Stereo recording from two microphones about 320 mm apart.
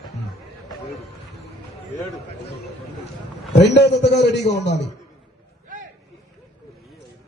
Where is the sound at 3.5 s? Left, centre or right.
Left.